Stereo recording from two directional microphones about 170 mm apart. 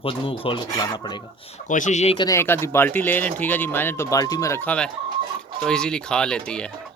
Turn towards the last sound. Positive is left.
turn(degrees=5)  # may be behind; listen again after turning